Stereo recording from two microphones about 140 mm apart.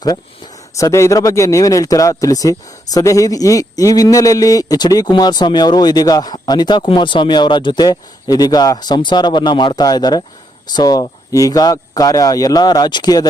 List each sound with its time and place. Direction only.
0.8 s speech: 20° left (ahead or behind)